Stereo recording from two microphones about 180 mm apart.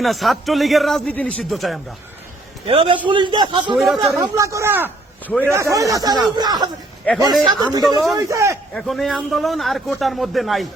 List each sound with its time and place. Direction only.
0.0 s a man's voice: centre (ahead or behind)
2.6 s a man's voice: 30° right (ahead or behind)
3.8 s a man's voice: centre (ahead or behind)
4.0 s speech: 15° right (ahead or behind)
7.1 s a man's voice: 10° left (ahead or behind)
7.4 s speech: 20° right (ahead or behind)
8.7 s a man's voice: centre (ahead or behind)